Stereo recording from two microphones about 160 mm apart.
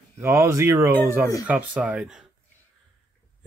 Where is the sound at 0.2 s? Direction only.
15° right (ahead or behind).